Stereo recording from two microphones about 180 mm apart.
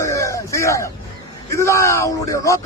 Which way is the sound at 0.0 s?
15° left (ahead or behind).